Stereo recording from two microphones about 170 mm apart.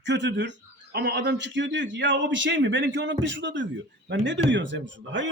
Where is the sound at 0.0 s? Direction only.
90° right.